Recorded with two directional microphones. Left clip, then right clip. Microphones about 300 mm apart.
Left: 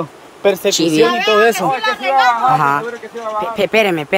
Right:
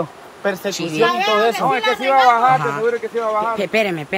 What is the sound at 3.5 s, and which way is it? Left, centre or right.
Speech, centre.